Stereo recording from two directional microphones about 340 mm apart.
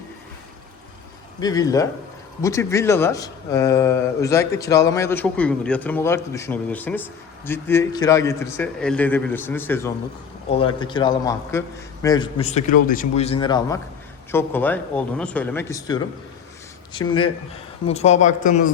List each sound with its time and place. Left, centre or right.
1.4 s a man's voice: centre